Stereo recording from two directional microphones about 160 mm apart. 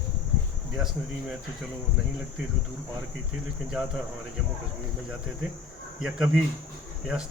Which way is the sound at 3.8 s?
5° right (ahead or behind).